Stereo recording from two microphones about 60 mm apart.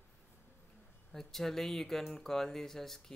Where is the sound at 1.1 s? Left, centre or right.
Centre.